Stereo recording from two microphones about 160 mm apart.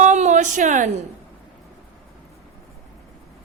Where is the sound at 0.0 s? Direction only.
45° right (ahead or behind).